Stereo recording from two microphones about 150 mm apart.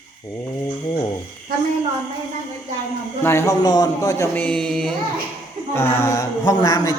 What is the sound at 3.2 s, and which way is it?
A man's voice, 20° left (ahead or behind).